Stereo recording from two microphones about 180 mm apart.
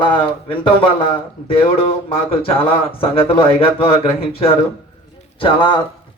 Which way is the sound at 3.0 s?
30° left (ahead or behind).